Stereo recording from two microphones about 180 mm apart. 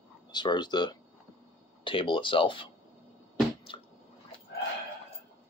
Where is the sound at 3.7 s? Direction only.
30° left (ahead or behind).